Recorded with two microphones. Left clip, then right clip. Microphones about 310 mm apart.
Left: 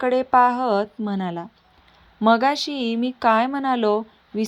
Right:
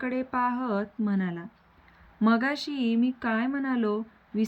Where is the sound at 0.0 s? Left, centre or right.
Left.